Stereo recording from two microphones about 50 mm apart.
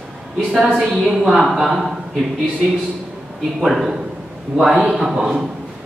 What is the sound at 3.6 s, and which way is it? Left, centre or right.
A woman's voice, centre.